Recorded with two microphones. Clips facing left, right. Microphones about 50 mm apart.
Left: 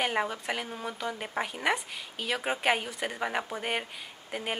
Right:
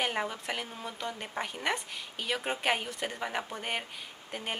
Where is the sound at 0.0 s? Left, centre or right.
Centre.